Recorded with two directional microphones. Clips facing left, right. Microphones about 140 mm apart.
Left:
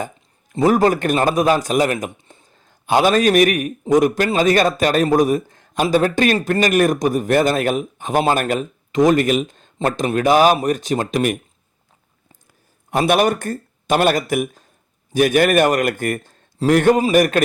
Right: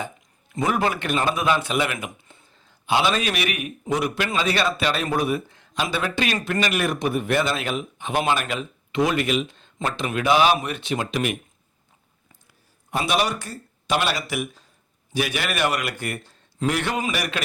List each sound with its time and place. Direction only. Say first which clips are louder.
0.5 s speech: left 8 dB; 35° left (ahead or behind)
12.9 s speech: left 7 dB; 55° left (ahead or behind)